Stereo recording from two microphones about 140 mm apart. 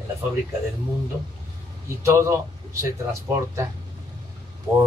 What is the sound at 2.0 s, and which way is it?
Speech, 20° right (ahead or behind).